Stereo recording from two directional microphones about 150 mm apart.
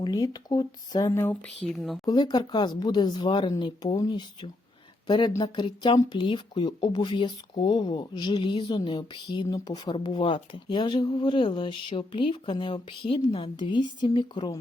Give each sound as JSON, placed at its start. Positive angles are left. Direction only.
{"t": 0.0, "sound": "speech", "side_deg": 25}
{"t": 2.0, "sound": "a woman's voice", "side_deg": 30}